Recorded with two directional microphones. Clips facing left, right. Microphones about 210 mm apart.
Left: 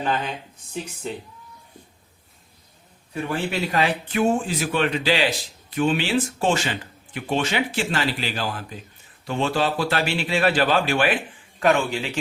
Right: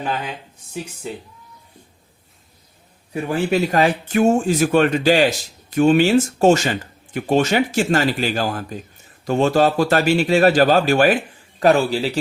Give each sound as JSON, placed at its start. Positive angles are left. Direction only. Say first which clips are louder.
{"t": 0.0, "sound": "speech", "louder": "even", "side_deg": -10}
{"t": 3.2, "sound": "a man's voice", "louder": "right 6 dB", "side_deg": -45}